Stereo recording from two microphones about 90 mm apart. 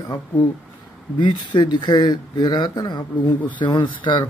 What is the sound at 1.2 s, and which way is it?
A man's voice, 55° left (ahead or behind).